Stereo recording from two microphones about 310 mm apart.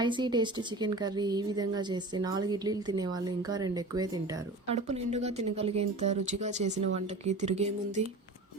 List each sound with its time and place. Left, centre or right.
0.0 s a woman's voice: centre